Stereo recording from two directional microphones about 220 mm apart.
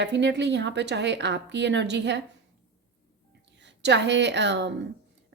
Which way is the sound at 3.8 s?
50° right (ahead or behind).